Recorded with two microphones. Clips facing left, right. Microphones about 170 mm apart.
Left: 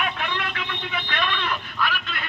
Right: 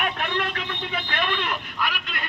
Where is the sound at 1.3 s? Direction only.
15° right (ahead or behind).